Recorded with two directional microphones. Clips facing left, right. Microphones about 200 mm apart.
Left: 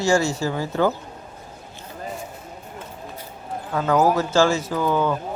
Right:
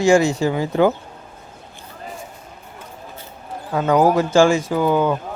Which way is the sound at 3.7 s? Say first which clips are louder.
Right 3 dB; 20° right (ahead or behind).